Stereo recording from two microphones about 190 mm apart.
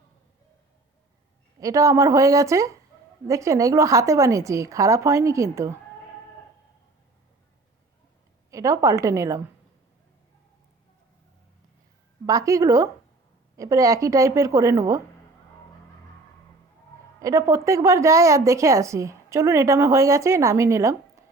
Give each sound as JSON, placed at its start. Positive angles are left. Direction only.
{"t": 1.5, "sound": "speech", "side_deg": -15}
{"t": 8.4, "sound": "speech", "side_deg": -15}
{"t": 12.2, "sound": "speech", "side_deg": -20}
{"t": 17.2, "sound": "speech", "side_deg": -15}